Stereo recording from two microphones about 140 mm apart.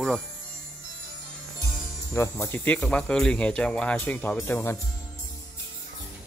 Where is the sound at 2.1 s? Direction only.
20° left (ahead or behind).